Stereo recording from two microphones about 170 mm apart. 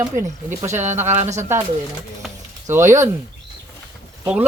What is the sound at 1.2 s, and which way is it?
Speech, 40° right (ahead or behind).